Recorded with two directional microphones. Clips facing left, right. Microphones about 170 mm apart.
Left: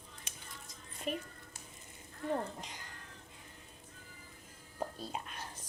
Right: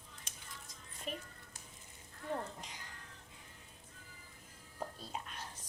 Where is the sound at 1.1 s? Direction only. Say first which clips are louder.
Left 6 dB; 55° left (ahead or behind).